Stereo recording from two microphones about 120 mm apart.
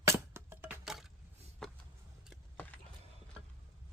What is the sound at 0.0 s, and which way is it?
Music, 20° right (ahead or behind).